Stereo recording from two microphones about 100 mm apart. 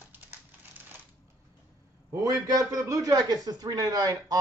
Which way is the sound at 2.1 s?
35° right (ahead or behind).